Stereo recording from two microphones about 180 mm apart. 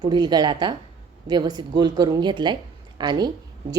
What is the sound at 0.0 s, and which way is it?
A woman's voice, 25° right (ahead or behind).